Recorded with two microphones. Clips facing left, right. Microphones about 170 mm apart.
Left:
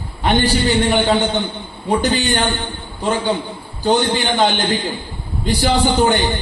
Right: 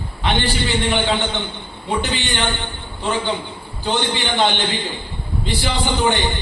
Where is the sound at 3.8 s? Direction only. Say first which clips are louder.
Left 5 dB; 40° left (ahead or behind).